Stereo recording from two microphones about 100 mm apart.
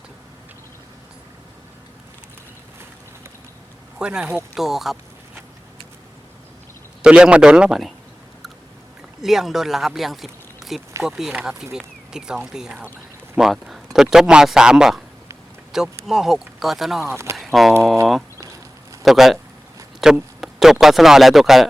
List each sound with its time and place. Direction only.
3.9 s speech: 10° right (ahead or behind)
7.0 s speech: 10° right (ahead or behind)
9.2 s speech: 5° right (ahead or behind)
18.3 s a sound: 35° right (ahead or behind)
19.0 s speech: centre (ahead or behind)